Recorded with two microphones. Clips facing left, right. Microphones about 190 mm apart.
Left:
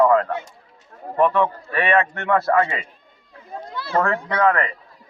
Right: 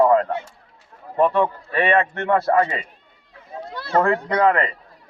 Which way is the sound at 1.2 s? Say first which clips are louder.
Even; 25° right (ahead or behind).